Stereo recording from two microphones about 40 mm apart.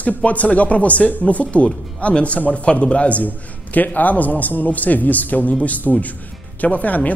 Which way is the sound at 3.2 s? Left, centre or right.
Left.